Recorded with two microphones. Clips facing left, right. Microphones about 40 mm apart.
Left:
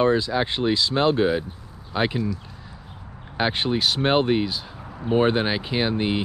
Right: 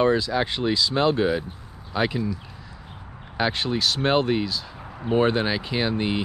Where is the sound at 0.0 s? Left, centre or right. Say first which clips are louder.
Left 1 dB; left.